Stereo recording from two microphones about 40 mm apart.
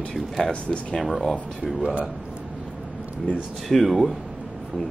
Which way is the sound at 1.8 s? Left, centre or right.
Right.